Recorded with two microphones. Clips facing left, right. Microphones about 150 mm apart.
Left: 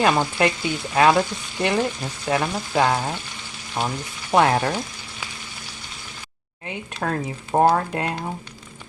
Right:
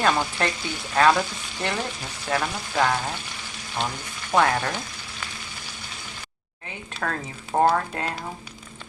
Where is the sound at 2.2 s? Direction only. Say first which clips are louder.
Left 3 dB; 20° left (ahead or behind).